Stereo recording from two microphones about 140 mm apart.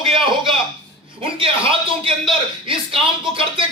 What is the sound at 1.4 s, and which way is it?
A man's voice, 40° right (ahead or behind).